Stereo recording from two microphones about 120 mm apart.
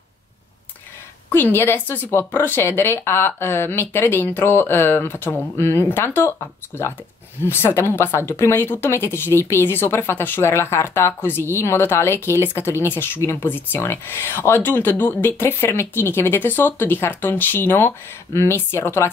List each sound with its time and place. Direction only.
1.3 s speech: 20° left (ahead or behind)
7.4 s speech: 20° left (ahead or behind)